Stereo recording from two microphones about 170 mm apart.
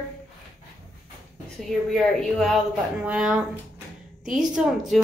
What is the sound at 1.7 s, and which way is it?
A woman's voice, centre (ahead or behind).